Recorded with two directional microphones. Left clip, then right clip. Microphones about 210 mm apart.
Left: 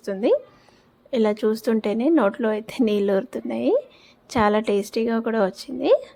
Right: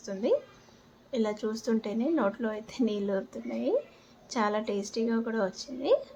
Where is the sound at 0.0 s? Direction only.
40° left (ahead or behind).